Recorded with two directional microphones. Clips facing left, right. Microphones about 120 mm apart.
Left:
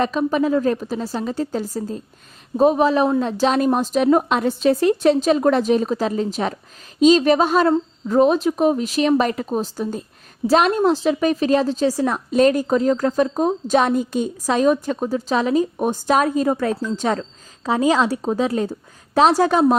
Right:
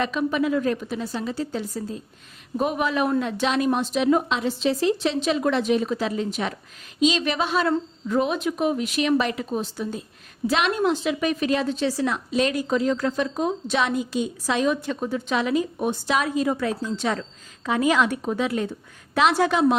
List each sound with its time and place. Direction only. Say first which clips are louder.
0.0 s a woman's voice: left 4 dB; 40° left (ahead or behind)